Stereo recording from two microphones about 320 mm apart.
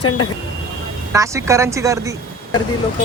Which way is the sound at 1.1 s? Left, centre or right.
Centre.